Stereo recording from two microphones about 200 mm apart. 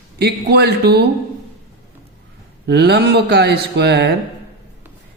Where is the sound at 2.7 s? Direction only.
55° right (ahead or behind).